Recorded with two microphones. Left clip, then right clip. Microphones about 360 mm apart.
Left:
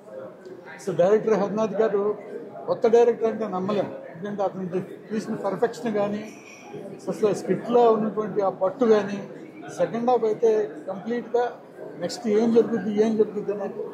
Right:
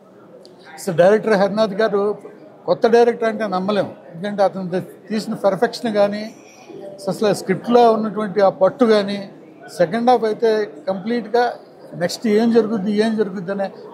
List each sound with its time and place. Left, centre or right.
0.9 s a man's voice: right